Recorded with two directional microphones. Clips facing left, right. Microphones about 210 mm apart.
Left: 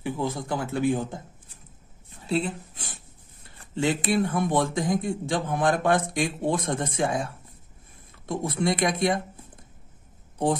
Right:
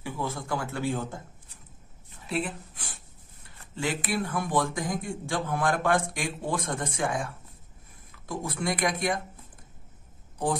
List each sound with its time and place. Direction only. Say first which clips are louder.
0.0 s speech: left 5 dB; 20° left (ahead or behind)
2.2 s speech: left 4 dB; 25° left (ahead or behind)